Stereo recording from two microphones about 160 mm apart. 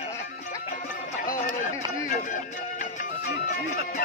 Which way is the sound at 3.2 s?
75° left (ahead or behind).